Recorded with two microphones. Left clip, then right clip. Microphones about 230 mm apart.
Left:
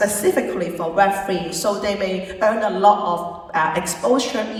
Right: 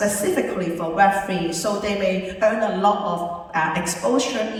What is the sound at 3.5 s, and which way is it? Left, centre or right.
Speech, centre.